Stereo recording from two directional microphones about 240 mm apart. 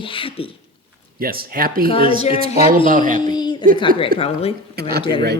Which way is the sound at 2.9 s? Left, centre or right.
Right.